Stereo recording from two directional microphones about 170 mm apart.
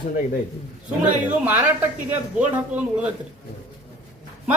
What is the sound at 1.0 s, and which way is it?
A man's voice, 10° right (ahead or behind).